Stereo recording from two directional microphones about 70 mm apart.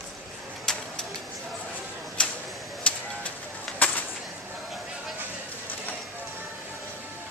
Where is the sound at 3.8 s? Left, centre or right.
Left.